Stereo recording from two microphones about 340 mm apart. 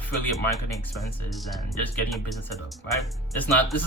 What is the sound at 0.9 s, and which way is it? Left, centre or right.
Speech, centre.